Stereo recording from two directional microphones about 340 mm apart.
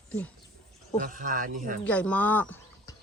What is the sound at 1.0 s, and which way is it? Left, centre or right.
Speech, right.